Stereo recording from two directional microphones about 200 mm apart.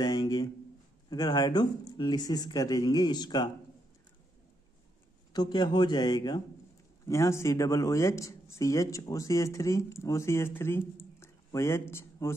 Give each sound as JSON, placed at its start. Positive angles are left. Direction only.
{"t": 0.0, "sound": "a sound", "side_deg": 20}
{"t": 1.1, "sound": "speech", "side_deg": 20}
{"t": 5.3, "sound": "speech", "side_deg": 20}